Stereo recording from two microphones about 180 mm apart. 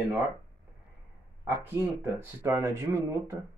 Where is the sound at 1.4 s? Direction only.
15° right (ahead or behind).